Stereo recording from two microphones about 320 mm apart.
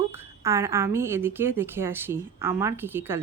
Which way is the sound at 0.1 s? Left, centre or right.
Centre.